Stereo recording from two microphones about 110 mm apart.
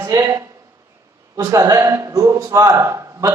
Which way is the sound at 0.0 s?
30° right (ahead or behind).